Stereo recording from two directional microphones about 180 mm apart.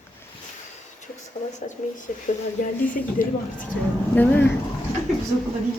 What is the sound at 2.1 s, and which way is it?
Speech, 45° left (ahead or behind).